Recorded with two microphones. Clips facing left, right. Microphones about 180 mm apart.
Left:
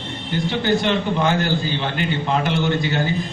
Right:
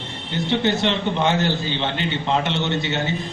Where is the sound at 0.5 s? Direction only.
25° right (ahead or behind).